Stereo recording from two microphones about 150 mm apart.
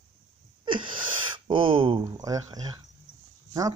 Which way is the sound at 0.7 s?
35° right (ahead or behind).